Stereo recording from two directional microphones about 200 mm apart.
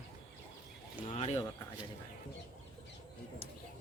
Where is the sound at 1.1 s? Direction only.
30° left (ahead or behind).